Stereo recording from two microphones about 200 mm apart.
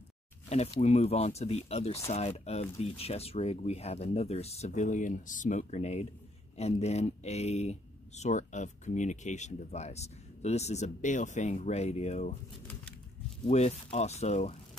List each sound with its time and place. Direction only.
0.5 s speech: 35° left (ahead or behind)
13.5 s speech: 35° left (ahead or behind)